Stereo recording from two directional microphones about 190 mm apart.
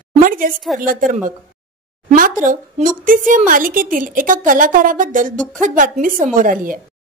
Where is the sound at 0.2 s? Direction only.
45° right (ahead or behind).